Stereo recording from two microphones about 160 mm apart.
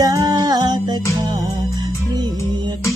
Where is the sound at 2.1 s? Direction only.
25° right (ahead or behind).